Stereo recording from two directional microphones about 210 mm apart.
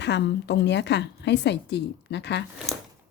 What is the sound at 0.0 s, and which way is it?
A woman's voice, 55° left (ahead or behind).